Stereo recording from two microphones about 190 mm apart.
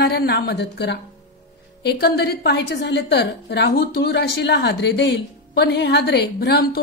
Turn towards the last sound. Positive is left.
turn(degrees=60)  # may be behind; listen again after turning